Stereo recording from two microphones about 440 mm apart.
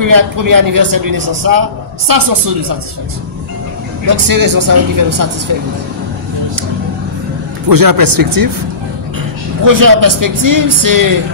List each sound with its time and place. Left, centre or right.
0.0 s a man's voice: right
4.0 s a man's voice: right
7.6 s a man's voice: right
9.7 s a man's voice: right